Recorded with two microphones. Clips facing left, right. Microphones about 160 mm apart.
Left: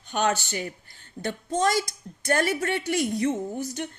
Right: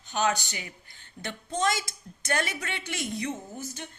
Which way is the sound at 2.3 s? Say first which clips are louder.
Left 7 dB; 45° left (ahead or behind).